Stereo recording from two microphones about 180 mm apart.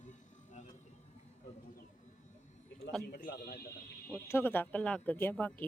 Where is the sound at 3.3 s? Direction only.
60° left (ahead or behind).